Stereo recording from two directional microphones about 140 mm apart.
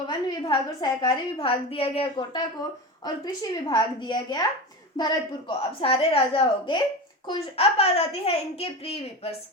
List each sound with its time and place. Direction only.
0.1 s a woman's voice: 30° left (ahead or behind)
5.8 s a child's voice: 45° left (ahead or behind)